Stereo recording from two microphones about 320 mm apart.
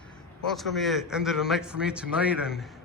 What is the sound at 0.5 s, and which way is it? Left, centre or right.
A man's voice, centre.